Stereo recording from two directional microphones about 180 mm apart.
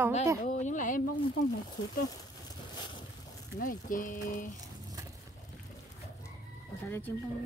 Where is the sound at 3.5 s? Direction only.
50° left (ahead or behind).